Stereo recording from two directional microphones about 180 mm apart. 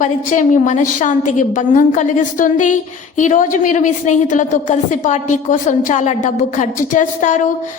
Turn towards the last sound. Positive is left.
turn(degrees=45)  # may be behind; listen again after turning